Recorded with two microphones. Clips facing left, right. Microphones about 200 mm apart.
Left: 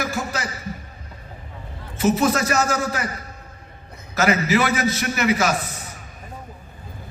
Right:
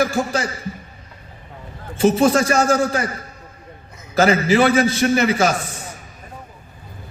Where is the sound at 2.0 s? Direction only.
30° right (ahead or behind).